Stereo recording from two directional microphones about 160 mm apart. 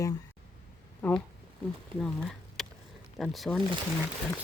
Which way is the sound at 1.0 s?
10° left (ahead or behind).